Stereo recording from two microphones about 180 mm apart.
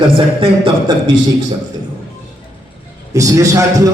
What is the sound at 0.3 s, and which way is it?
Speech, 30° right (ahead or behind).